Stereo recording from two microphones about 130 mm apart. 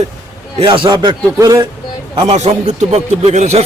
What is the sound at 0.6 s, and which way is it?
A man's voice, 35° right (ahead or behind).